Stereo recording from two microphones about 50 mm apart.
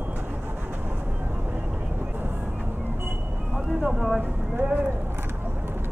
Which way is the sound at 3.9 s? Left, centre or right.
Centre.